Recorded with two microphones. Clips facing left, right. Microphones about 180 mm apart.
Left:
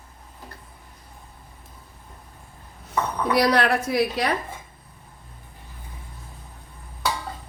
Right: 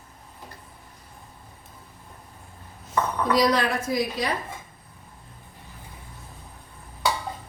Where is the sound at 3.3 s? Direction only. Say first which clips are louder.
Left 2 dB; 65° left (ahead or behind).